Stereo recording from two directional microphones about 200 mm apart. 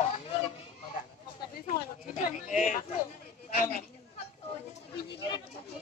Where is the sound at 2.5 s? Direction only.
40° left (ahead or behind).